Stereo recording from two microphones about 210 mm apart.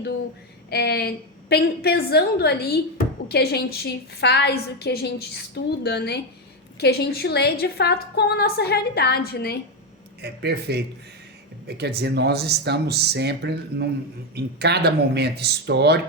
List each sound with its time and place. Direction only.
0.7 s a woman's voice: 50° left (ahead or behind)
10.2 s speech: 50° right (ahead or behind)